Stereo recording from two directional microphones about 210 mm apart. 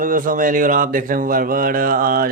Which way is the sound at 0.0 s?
40° right (ahead or behind).